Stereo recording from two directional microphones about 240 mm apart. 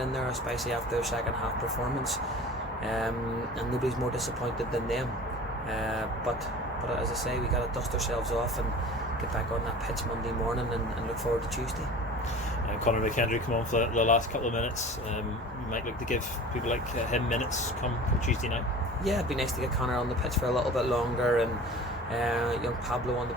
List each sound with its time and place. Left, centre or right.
4.4 s speech: centre
8.1 s speech: centre
12.8 s speech: left
15.7 s speech: left
19.0 s speech: centre